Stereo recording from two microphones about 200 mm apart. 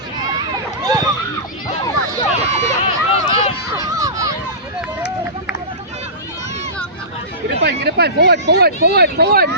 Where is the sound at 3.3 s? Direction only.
15° right (ahead or behind).